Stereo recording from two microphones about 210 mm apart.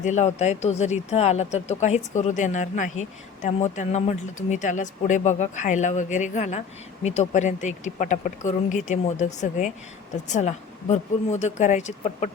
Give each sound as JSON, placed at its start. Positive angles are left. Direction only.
{"t": 0.0, "sound": "speech", "side_deg": 35}